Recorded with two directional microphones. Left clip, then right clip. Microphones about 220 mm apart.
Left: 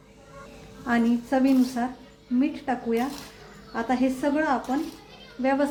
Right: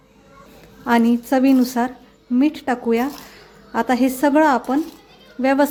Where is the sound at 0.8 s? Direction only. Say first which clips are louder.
Right 8 dB; 50° right (ahead or behind).